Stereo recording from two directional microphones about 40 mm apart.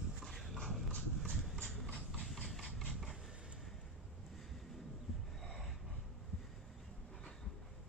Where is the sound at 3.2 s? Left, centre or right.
Centre.